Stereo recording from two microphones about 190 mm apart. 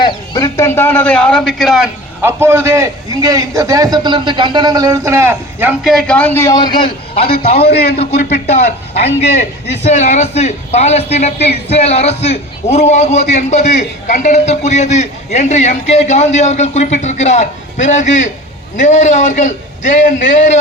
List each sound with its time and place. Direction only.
0.0 s a man's voice: 15° left (ahead or behind); by 1.9 s centre (ahead or behind)
2.2 s a man's voice: 15° right (ahead or behind)
5.9 s a man's voice: 5° left (ahead or behind); by 7.3 s 25° left (ahead or behind)
7.7 s a man's voice: 55° left (ahead or behind)
8.4 s a man's voice: 35° left (ahead or behind)